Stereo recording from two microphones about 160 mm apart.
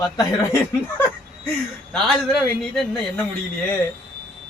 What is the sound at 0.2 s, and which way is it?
Speech, 15° left (ahead or behind).